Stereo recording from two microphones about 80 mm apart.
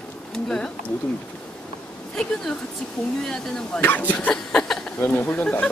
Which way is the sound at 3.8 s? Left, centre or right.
Left.